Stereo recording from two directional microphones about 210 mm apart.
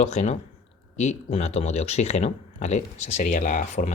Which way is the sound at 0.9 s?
35° left (ahead or behind).